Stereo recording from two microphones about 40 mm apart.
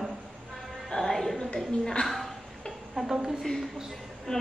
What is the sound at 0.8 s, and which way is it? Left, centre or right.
Music, centre.